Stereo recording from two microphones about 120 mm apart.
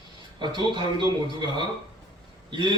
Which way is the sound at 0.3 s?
40° right (ahead or behind).